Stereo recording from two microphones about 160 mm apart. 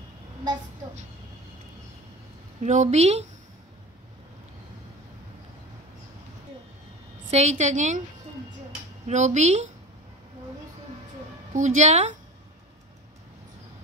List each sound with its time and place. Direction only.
2.6 s a woman's voice: 45° right (ahead or behind)
7.2 s a woman's voice: 45° right (ahead or behind)
9.0 s a woman's voice: 50° right (ahead or behind)
11.5 s a woman's voice: 50° right (ahead or behind)